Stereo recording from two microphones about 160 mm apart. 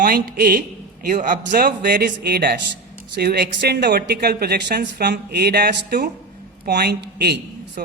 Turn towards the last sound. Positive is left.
turn(degrees=-70)  # may be behind; listen again after turning